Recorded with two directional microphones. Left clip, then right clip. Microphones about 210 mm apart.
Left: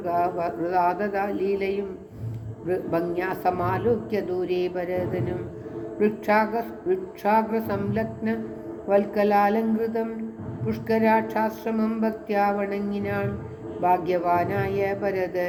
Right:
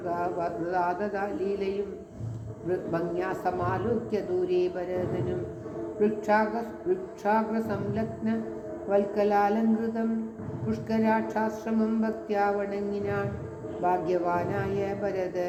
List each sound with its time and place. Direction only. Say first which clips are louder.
0.0 s a woman's voice: left 5 dB; 25° left (ahead or behind)